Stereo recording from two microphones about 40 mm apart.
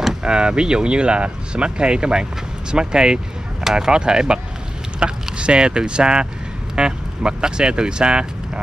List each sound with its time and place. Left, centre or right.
0.2 s speech: right